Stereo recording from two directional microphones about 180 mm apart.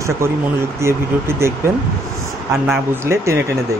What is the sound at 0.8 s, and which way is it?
Speech, 15° right (ahead or behind).